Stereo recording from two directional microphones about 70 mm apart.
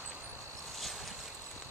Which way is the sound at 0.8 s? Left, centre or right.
Centre.